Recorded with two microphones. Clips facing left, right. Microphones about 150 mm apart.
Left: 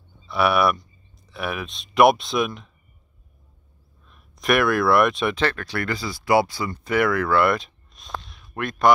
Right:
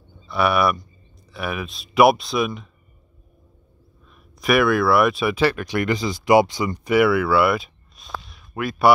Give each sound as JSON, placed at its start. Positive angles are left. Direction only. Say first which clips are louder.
{"t": 0.3, "sound": "speech", "louder": "even", "side_deg": 0}
{"t": 4.0, "sound": "speech", "louder": "right 3 dB", "side_deg": 0}